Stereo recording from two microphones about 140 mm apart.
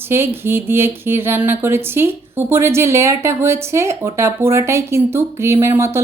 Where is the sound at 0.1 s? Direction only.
15° right (ahead or behind).